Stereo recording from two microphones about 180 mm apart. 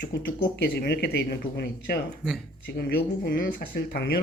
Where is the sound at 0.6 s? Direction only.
65° left (ahead or behind).